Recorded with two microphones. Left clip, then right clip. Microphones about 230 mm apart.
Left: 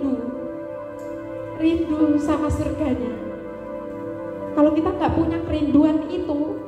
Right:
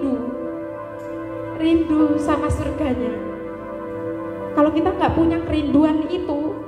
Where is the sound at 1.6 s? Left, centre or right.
Right.